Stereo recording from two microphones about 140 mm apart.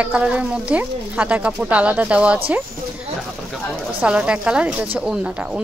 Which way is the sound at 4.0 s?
10° right (ahead or behind).